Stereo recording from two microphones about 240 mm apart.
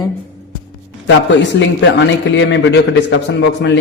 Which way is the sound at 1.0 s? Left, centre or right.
Left.